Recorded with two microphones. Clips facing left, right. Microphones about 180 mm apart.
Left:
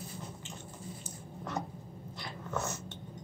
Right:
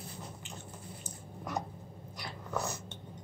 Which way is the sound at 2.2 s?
15° right (ahead or behind).